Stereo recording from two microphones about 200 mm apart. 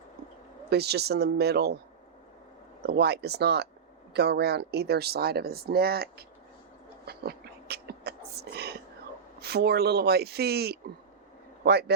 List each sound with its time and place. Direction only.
0.7 s speech: 55° right (ahead or behind)
2.8 s speech: 55° right (ahead or behind)
7.0 s a sound: 55° right (ahead or behind)
9.4 s a man's voice: 55° right (ahead or behind)